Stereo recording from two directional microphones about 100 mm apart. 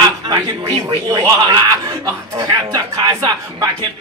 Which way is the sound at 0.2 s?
45° right (ahead or behind).